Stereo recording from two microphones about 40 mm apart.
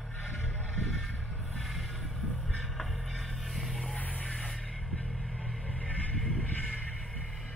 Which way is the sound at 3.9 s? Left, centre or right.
Left.